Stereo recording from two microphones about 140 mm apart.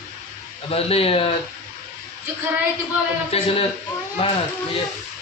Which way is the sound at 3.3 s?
45° left (ahead or behind).